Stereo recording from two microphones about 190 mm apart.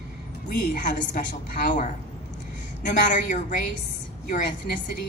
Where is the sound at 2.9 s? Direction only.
40° left (ahead or behind).